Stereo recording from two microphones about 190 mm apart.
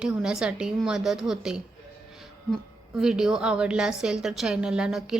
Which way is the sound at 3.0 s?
5° right (ahead or behind).